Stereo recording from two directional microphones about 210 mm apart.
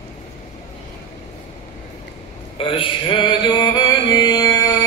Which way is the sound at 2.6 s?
25° left (ahead or behind).